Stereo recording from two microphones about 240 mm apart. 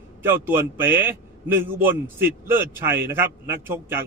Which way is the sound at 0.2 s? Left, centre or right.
Centre.